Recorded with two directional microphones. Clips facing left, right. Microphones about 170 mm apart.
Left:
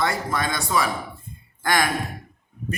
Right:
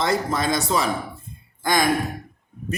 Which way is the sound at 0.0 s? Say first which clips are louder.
Right 2 dB; 20° right (ahead or behind).